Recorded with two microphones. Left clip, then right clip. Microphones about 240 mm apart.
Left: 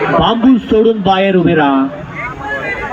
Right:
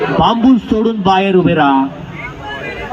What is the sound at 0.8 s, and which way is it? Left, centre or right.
Speech, right.